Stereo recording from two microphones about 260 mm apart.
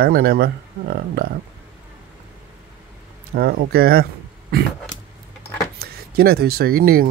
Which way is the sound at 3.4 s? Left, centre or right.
Right.